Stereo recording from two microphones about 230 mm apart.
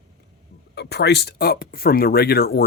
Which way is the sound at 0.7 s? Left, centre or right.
Left.